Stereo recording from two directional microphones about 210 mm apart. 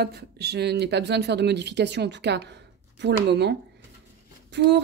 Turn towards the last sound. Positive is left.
turn(degrees=-55)  # may be behind; listen again after turning